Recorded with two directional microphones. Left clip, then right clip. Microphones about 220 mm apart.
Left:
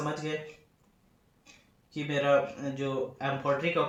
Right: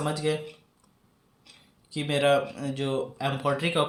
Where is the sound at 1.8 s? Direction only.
50° right (ahead or behind).